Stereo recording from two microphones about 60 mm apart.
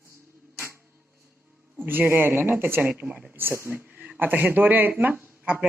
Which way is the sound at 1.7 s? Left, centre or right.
Right.